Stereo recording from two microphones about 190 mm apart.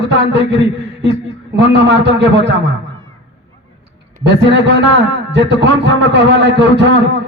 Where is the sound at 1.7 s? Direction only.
65° right (ahead or behind).